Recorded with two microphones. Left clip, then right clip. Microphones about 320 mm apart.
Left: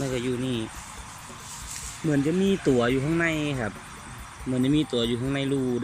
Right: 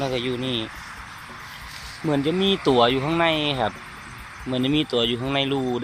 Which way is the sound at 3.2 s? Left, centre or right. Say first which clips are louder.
Right 5 dB; centre.